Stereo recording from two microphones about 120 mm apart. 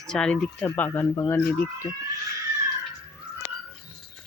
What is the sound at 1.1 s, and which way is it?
Speech, 25° left (ahead or behind).